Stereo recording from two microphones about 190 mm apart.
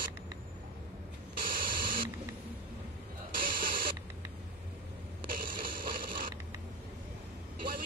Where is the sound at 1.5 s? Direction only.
50° right (ahead or behind).